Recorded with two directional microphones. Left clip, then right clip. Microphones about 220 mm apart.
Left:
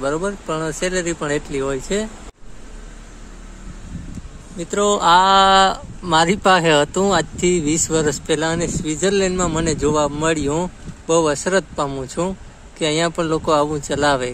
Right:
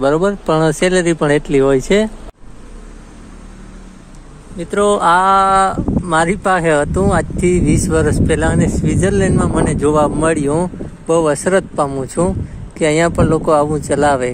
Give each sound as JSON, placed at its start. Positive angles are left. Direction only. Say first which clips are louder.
{"t": 0.0, "sound": "speech", "louder": "right 8 dB", "side_deg": -30}
{"t": 4.6, "sound": "speech", "louder": "right 4 dB", "side_deg": 5}